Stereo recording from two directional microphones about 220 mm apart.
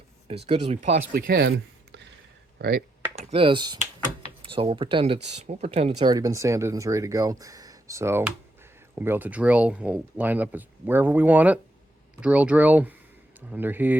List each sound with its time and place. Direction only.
0.4 s speech: 30° right (ahead or behind)
1.1 s speech: 45° right (ahead or behind)
3.2 s speech: 25° right (ahead or behind)
6.0 s speech: 20° right (ahead or behind)